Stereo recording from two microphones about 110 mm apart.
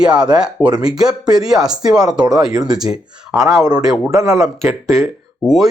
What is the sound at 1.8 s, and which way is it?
Speech, 35° right (ahead or behind).